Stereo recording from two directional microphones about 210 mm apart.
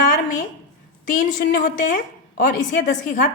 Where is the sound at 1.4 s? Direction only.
45° left (ahead or behind).